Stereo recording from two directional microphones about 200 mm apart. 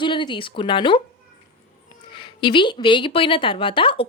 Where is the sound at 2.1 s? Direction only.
25° left (ahead or behind).